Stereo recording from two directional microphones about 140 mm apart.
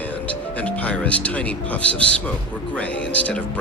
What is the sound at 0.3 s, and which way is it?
Speech, 10° left (ahead or behind).